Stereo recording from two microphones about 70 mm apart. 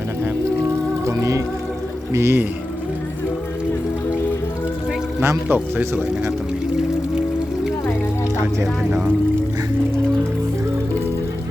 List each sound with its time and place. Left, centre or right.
1.0 s music: right
2.1 s speech: right
5.5 s a man's voice: right